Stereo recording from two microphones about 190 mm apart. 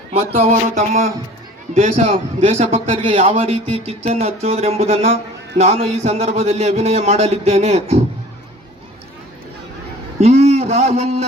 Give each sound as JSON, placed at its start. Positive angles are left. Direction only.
{"t": 0.3, "sound": "a man's voice", "side_deg": -40}
{"t": 1.7, "sound": "a man's voice", "side_deg": -30}
{"t": 10.2, "sound": "a man's voice", "side_deg": -35}